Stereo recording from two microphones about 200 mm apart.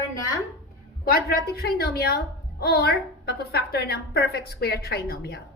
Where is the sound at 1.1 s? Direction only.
50° left (ahead or behind).